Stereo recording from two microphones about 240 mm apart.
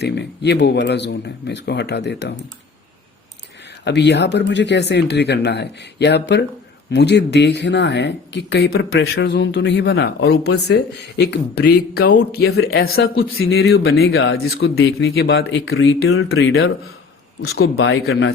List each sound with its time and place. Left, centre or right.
0.0 s speech: left
3.8 s speech: left
13.4 s speech: left